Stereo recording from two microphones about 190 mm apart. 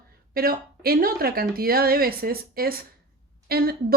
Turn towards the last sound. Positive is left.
turn(degrees=-55)  # may be behind; listen again after turning